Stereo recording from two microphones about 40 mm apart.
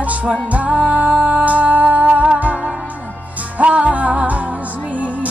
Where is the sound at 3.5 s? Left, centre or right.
Right.